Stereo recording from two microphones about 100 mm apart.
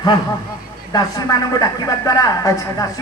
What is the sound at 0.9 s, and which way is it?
A man's voice, 40° left (ahead or behind).